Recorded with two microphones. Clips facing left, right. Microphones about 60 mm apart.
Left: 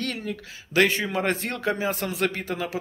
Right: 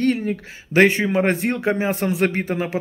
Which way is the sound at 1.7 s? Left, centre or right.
Right.